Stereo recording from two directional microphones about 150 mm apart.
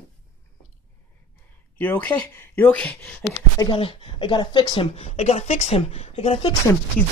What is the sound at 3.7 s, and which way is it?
A woman's voice, 35° left (ahead or behind).